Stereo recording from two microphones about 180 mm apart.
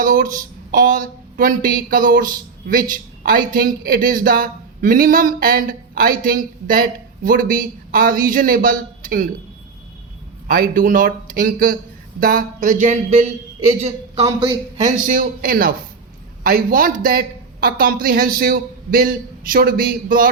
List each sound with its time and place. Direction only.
0.0 s speech: 50° right (ahead or behind)
10.5 s speech: 50° right (ahead or behind)
14.8 s speech: 50° right (ahead or behind)